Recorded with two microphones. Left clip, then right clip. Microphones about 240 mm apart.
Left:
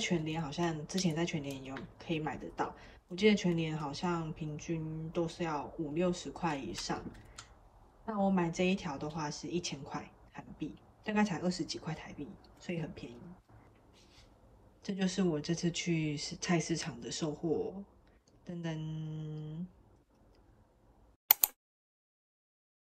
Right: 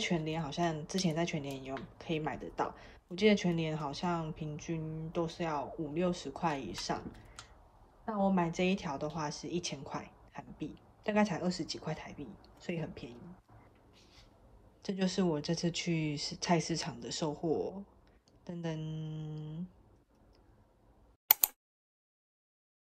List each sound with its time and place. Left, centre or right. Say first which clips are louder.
0.0 s speech: even; right
8.0 s speech: right 1 dB; right
14.8 s speech: right 1 dB; centre
18.4 s humming: right 1 dB; centre
21.3 s a sound: even; centre